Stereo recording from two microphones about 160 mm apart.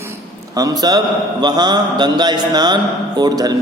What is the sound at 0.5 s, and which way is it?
A man's voice, 25° right (ahead or behind).